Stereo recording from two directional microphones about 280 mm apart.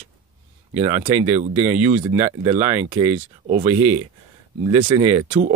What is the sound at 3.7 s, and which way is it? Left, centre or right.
Speech, right.